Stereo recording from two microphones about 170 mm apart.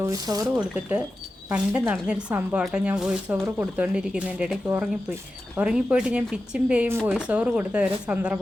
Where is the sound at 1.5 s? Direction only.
10° right (ahead or behind).